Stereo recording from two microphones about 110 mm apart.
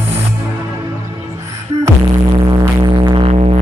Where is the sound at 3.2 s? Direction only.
80° right.